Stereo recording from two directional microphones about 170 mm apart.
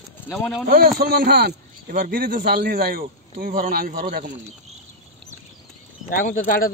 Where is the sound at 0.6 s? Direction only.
60° right (ahead or behind).